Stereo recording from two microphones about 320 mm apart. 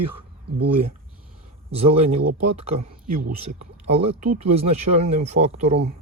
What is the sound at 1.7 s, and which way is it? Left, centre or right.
Speech, centre.